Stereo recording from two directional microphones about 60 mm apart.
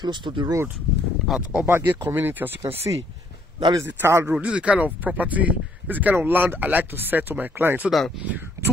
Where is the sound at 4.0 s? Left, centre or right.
Right.